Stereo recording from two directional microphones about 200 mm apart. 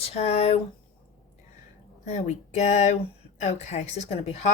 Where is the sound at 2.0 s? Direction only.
35° left (ahead or behind).